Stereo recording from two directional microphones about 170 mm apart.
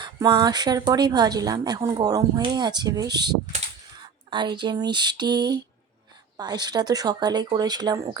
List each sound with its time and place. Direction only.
0.0 s a woman's voice: 25° right (ahead or behind)